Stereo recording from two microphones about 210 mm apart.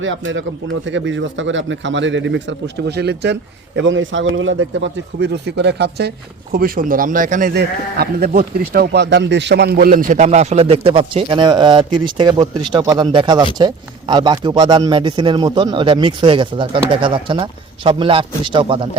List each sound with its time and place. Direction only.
0.0 s speech: 65° right (ahead or behind)
3.8 s speech: 65° right (ahead or behind); by 18.9 s 25° right (ahead or behind)